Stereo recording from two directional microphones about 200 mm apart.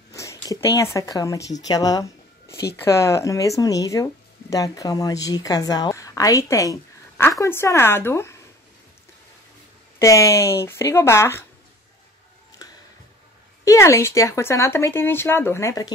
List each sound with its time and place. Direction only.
0.1 s a sound: 15° left (ahead or behind)
0.9 s speech: 15° left (ahead or behind)
9.9 s speech: 15° left (ahead or behind)
12.6 s tick-tock: 20° left (ahead or behind)
13.7 s speech: 15° left (ahead or behind)